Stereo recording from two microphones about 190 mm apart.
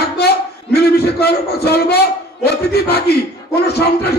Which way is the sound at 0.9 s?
55° left (ahead or behind).